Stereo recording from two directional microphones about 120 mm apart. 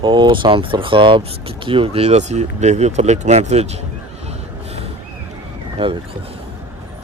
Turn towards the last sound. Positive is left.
turn(degrees=-45)  # may be behind; listen again after turning